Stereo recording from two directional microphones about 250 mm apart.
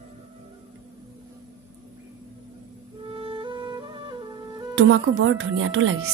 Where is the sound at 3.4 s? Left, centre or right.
Centre.